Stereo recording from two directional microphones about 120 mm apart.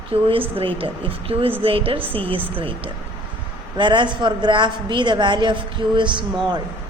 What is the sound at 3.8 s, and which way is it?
A woman's voice, 40° right (ahead or behind).